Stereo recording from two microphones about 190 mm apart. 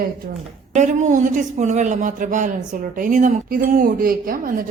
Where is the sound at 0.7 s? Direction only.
40° right (ahead or behind).